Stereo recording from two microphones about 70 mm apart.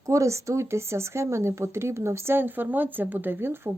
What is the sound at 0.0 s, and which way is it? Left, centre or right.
Speech, right.